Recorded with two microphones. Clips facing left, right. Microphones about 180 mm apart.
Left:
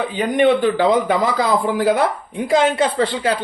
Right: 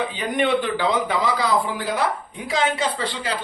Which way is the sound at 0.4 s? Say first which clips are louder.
Left 7 dB; 50° left (ahead or behind).